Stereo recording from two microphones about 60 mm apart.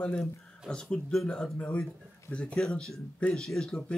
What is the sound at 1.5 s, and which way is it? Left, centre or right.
Speech, centre.